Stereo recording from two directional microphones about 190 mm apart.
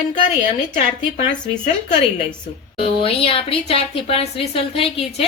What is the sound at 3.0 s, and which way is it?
A woman's voice, 30° left (ahead or behind).